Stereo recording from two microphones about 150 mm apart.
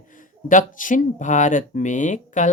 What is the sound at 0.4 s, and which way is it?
Speech, 60° left (ahead or behind).